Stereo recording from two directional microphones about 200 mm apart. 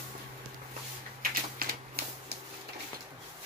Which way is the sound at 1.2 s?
50° right (ahead or behind).